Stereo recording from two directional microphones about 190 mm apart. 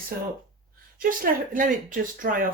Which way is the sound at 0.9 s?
45° right (ahead or behind).